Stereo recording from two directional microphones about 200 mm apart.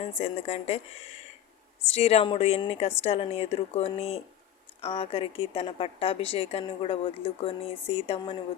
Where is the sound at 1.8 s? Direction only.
30° left (ahead or behind).